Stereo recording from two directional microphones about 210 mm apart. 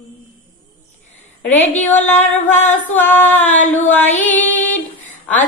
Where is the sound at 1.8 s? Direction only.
10° left (ahead or behind).